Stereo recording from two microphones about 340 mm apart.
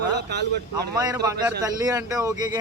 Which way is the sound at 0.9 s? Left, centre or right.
Centre.